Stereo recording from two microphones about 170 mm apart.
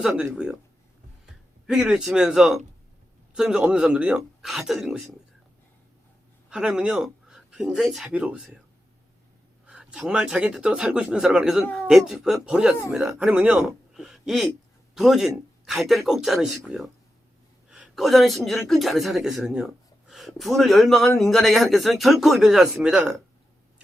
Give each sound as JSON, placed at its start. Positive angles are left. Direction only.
{"t": 0.1, "sound": "a man's voice", "side_deg": -10}
{"t": 1.6, "sound": "a man's voice", "side_deg": -5}
{"t": 6.5, "sound": "speech", "side_deg": -5}
{"t": 9.6, "sound": "a man's voice", "side_deg": -5}